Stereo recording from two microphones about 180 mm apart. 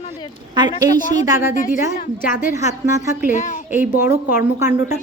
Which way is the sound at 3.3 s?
45° left (ahead or behind).